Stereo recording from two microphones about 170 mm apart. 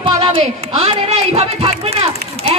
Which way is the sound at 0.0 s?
30° right (ahead or behind).